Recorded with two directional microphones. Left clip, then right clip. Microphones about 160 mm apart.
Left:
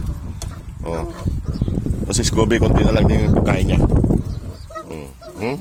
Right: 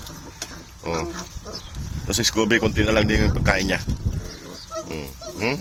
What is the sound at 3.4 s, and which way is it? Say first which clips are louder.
Speech: even; centre (ahead or behind).